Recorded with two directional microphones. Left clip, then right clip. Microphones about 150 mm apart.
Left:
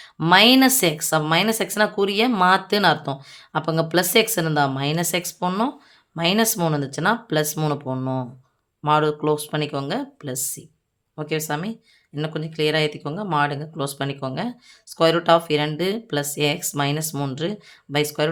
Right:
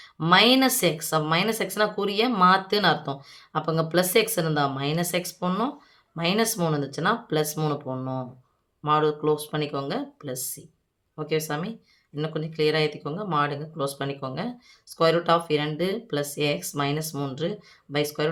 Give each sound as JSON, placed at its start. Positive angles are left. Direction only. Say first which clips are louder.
{"t": 0.0, "sound": "speech", "louder": "left 4 dB", "side_deg": 40}